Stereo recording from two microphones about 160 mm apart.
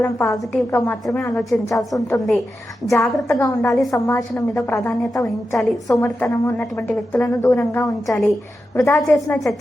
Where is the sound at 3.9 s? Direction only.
20° left (ahead or behind).